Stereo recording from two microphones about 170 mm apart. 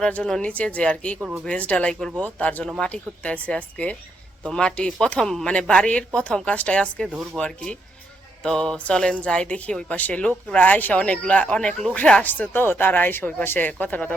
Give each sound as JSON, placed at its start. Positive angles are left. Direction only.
{"t": 0.0, "sound": "speech", "side_deg": 5}